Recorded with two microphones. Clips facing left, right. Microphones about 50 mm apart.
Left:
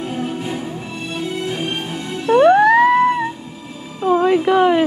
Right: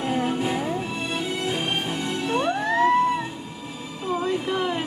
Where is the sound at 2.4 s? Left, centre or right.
Left.